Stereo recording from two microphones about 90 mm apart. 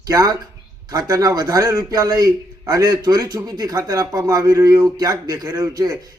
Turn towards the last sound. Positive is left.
turn(degrees=-45)  # may be behind; listen again after turning